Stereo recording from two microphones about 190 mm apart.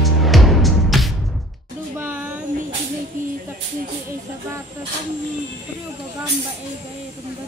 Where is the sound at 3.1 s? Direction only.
45° right (ahead or behind).